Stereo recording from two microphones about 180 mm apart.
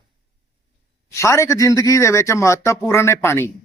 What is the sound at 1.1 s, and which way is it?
Speech, 15° left (ahead or behind).